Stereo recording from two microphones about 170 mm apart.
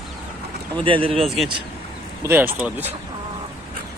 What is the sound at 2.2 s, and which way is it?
Speech, 15° right (ahead or behind).